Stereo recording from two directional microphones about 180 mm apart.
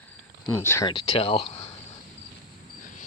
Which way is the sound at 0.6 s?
15° left (ahead or behind).